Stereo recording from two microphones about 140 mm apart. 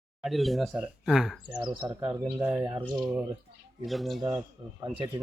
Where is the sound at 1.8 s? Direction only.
20° right (ahead or behind).